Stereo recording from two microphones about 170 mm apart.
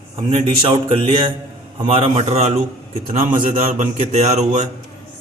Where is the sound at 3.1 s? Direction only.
50° right (ahead or behind).